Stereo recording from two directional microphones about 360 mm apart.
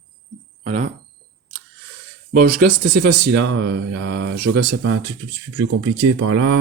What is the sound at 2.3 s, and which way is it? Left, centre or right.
Speech, right.